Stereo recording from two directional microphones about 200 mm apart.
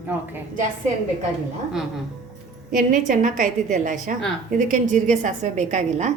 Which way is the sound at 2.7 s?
40° right (ahead or behind).